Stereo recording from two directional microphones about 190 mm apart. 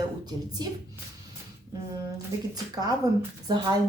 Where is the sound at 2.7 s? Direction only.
20° right (ahead or behind).